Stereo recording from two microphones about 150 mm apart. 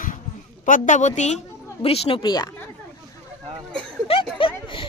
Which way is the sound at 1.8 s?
40° left (ahead or behind).